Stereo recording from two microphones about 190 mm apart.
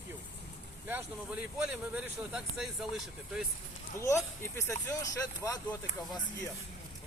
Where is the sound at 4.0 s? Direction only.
15° left (ahead or behind).